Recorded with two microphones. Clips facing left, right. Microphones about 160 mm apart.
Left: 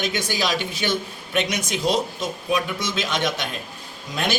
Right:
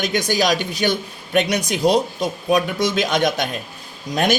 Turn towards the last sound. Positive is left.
turn(degrees=-45)  # may be behind; listen again after turning